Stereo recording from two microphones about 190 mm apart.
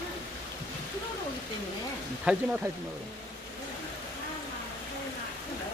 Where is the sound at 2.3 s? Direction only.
5° right (ahead or behind).